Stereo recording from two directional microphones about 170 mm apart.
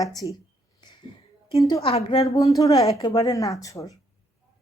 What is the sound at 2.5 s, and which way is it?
Speech, 20° left (ahead or behind).